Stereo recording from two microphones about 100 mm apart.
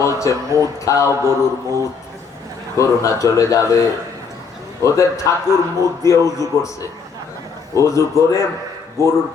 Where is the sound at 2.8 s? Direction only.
30° left (ahead or behind).